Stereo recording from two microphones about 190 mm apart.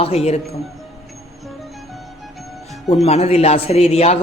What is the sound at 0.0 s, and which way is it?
Speech, 35° left (ahead or behind).